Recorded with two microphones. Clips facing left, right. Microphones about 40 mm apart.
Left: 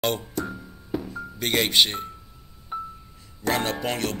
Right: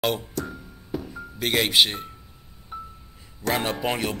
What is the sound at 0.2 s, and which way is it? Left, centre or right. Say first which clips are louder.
Music: left 1 dB; centre.